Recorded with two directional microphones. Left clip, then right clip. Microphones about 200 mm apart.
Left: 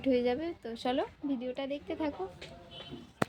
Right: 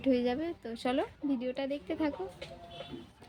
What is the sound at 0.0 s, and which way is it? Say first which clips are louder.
A woman's voice: left 1 dB; 5° left (ahead or behind).